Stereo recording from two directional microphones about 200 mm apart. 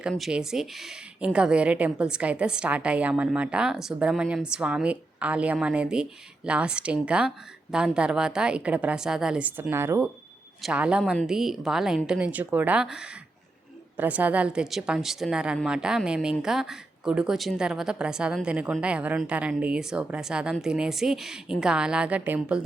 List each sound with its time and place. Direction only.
0.0 s speech: centre (ahead or behind)